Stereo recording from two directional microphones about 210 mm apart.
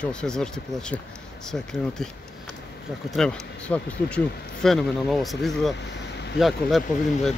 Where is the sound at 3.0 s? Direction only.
5° left (ahead or behind).